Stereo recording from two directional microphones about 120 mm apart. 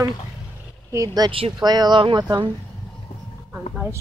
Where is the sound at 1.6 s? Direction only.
35° right (ahead or behind).